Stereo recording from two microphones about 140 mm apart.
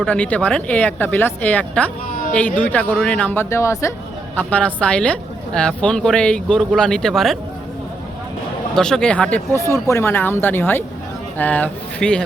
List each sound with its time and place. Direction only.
0.0 s a woman's voice: 10° left (ahead or behind)
4.4 s a woman's voice: 10° left (ahead or behind)
8.7 s speech: 5° left (ahead or behind)
9.6 s a woman's voice: 20° left (ahead or behind)